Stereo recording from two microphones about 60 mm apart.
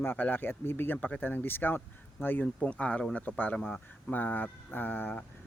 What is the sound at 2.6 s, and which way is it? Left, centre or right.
Speech, left.